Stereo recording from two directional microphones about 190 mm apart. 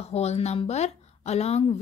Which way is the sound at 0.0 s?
35° left (ahead or behind).